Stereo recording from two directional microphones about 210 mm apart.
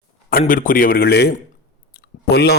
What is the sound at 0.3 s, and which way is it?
A man's voice, 45° left (ahead or behind).